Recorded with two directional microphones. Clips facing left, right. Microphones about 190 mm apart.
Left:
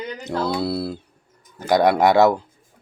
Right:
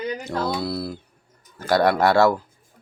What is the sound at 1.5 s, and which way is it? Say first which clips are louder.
Speech: left 2 dB; 15° left (ahead or behind).